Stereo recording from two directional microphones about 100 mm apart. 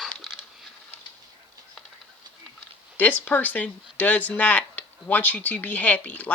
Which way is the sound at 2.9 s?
15° left (ahead or behind).